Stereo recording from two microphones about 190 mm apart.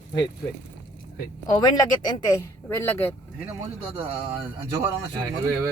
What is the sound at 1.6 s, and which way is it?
Speech, 20° left (ahead or behind).